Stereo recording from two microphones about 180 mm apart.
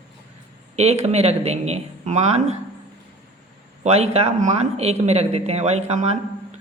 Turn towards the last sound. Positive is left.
turn(degrees=-35)  # may be behind; listen again after turning